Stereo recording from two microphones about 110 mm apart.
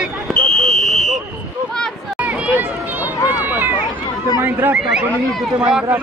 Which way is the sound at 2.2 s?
15° right (ahead or behind).